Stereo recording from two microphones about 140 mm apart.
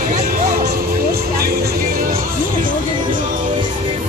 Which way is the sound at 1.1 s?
90° right.